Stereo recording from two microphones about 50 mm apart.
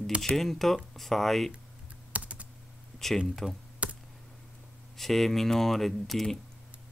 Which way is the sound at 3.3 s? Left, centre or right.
Centre.